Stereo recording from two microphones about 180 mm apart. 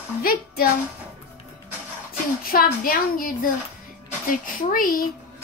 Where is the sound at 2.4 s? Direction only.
50° left (ahead or behind).